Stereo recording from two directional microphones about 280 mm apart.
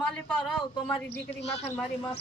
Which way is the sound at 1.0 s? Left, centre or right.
Left.